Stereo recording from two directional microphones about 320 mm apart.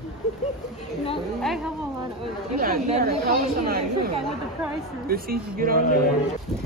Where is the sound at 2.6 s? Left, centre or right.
Right.